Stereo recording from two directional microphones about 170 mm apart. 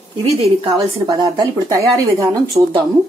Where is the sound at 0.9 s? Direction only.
25° right (ahead or behind).